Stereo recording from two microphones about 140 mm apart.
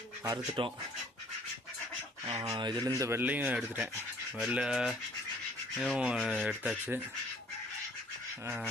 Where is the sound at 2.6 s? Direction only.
30° right (ahead or behind); by 7.0 s 10° right (ahead or behind).